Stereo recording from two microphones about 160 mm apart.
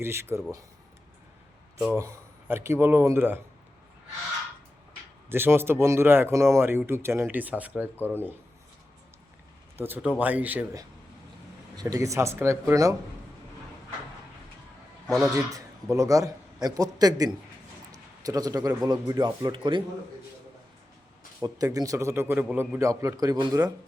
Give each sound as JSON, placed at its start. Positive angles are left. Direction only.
{"t": 0.0, "sound": "speech", "side_deg": -15}
{"t": 2.0, "sound": "speech", "side_deg": -20}
{"t": 5.3, "sound": "speech", "side_deg": -15}
{"t": 9.7, "sound": "speech", "side_deg": -15}
{"t": 11.8, "sound": "a man's voice", "side_deg": -20}
{"t": 15.0, "sound": "a man's voice", "side_deg": 0}
{"t": 15.4, "sound": "a man's voice", "side_deg": -20}
{"t": 17.9, "sound": "a sound", "side_deg": -25}
{"t": 18.8, "sound": "a man's voice", "side_deg": -25}
{"t": 21.4, "sound": "a man's voice", "side_deg": -25}